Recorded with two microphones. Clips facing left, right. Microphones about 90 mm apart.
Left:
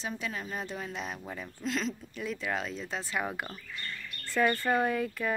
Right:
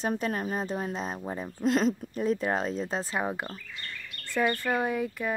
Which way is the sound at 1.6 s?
45° right (ahead or behind).